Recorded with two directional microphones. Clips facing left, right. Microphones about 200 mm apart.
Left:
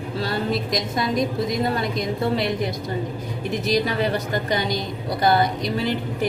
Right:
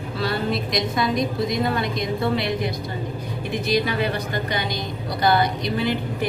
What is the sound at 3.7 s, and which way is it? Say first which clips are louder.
Speech: left 1 dB; 40° left (ahead or behind).